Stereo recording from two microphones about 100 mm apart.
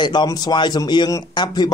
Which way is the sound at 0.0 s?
45° left (ahead or behind).